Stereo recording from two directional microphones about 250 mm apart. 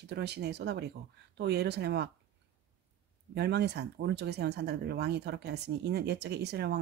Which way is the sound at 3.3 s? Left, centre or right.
Right.